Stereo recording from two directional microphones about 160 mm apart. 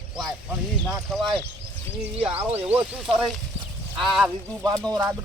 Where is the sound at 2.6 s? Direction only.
5° right (ahead or behind).